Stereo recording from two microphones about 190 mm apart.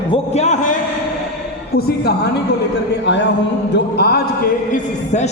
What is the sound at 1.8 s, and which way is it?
Speech, 55° left (ahead or behind).